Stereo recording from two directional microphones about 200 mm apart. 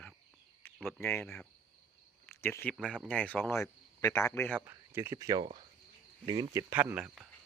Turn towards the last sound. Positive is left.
turn(degrees=-5)  # may be behind; listen again after turning